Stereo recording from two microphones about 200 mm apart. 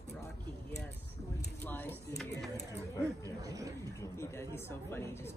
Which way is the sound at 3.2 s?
15° right (ahead or behind).